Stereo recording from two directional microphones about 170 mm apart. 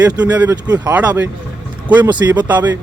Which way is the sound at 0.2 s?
10° right (ahead or behind).